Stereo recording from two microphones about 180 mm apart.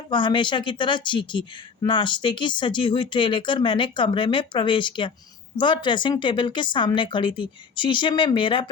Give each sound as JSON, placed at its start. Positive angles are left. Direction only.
{"t": 0.1, "sound": "speech", "side_deg": 25}